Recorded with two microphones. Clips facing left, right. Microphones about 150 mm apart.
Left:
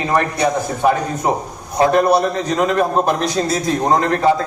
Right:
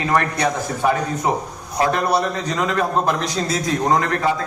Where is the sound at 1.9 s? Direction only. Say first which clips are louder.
Left 6 dB; 50° left (ahead or behind).